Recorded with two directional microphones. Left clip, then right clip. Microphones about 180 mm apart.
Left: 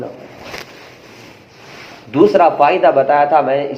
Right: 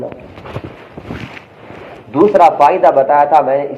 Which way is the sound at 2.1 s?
35° left (ahead or behind).